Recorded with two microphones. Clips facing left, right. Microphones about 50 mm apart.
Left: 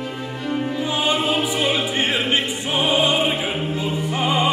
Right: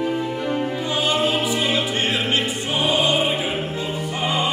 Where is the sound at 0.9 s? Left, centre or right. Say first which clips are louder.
Even; centre.